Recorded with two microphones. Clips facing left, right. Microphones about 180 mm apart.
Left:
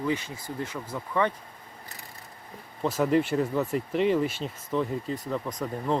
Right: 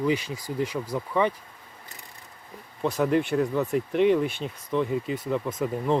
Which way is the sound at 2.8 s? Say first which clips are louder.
Even; centre (ahead or behind).